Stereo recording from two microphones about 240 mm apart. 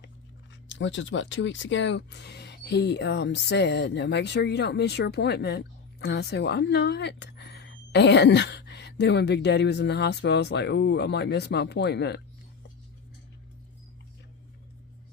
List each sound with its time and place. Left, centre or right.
0.7 s speech: left